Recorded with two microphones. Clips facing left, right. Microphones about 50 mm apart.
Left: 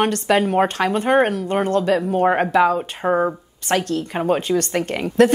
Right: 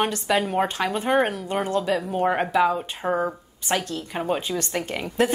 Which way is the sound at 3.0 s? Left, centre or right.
Centre.